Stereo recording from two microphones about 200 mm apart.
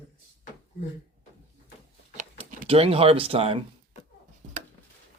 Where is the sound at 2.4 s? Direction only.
40° right (ahead or behind).